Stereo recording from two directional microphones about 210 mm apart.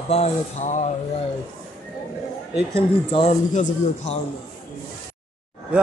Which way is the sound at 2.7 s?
25° left (ahead or behind).